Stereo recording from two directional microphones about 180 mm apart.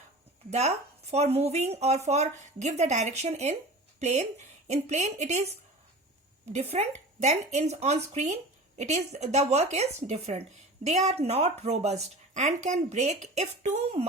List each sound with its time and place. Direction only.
0.5 s a woman's voice: 35° right (ahead or behind)